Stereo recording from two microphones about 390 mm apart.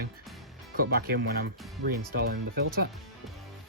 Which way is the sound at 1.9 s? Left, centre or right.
Right.